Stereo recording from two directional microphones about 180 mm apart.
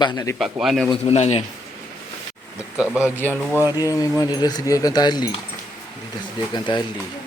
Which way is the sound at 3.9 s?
20° left (ahead or behind).